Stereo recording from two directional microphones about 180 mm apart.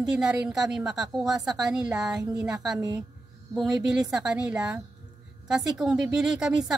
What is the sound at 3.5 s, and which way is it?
A woman's voice, centre (ahead or behind).